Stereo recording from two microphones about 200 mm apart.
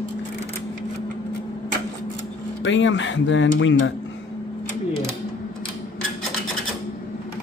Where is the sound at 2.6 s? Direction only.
65° left (ahead or behind).